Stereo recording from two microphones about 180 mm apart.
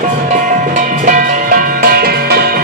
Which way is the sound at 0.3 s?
45° right (ahead or behind).